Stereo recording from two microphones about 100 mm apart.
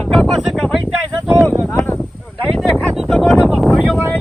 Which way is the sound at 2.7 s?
Centre (ahead or behind).